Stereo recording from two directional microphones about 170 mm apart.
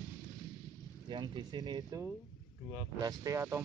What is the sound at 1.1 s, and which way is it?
Speech, 25° right (ahead or behind).